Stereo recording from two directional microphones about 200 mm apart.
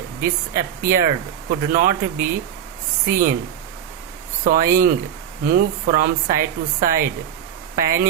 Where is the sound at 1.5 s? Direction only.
45° right (ahead or behind).